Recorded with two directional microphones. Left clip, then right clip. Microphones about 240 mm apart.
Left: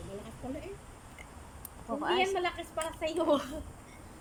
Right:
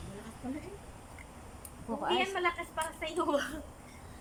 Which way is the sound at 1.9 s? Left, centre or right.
Centre.